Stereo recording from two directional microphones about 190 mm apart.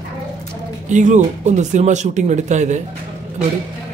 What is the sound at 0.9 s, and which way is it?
Speech, 40° right (ahead or behind).